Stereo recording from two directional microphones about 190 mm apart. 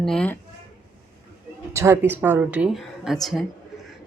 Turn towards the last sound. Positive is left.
turn(degrees=0)  # may be behind; listen again after turning